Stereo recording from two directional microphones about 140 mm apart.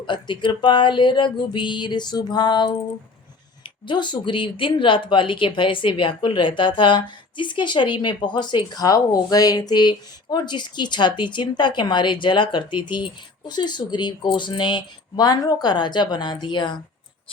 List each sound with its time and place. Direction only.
0.0 s a woman's voice: 35° left (ahead or behind)